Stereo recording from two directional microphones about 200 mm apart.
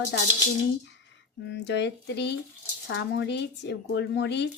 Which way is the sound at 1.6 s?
60° left (ahead or behind).